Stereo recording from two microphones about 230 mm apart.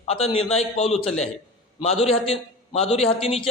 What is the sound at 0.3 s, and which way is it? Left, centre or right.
A man's voice, left.